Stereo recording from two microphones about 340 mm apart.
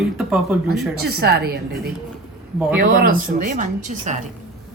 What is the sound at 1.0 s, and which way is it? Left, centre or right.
Speech, right.